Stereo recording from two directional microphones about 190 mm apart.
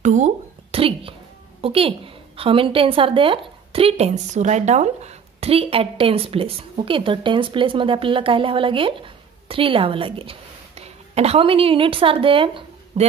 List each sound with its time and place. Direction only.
0.0 s a woman's voice: 40° right (ahead or behind)